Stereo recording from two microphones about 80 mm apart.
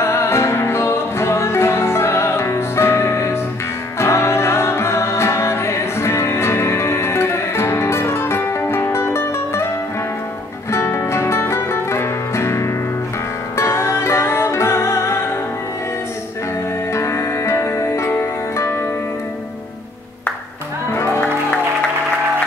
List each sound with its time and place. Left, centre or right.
0.0 s music: left
10.7 s music: left
16.9 s music: left
20.9 s music: left